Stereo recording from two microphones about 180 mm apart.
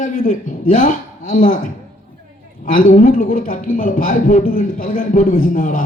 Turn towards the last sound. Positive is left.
turn(degrees=50)  # may be behind; listen again after turning